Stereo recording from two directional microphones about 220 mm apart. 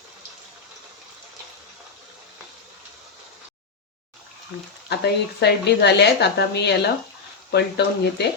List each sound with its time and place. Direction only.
4.9 s speech: 50° left (ahead or behind)